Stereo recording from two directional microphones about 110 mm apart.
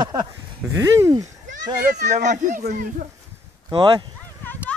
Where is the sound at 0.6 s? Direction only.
25° right (ahead or behind).